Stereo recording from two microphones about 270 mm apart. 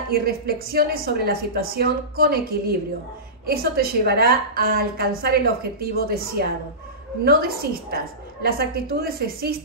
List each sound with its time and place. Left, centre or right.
0.1 s a woman's voice: right